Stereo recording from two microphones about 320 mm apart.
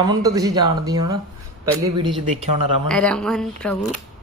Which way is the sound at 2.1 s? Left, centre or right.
Centre.